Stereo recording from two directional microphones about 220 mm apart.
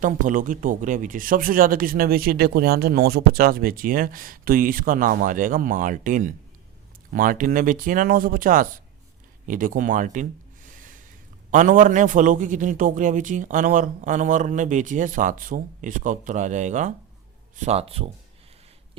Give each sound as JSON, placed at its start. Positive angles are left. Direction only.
{"t": 0.0, "sound": "speech", "side_deg": -35}
{"t": 10.7, "sound": "a sound", "side_deg": -35}
{"t": 11.5, "sound": "speech", "side_deg": -35}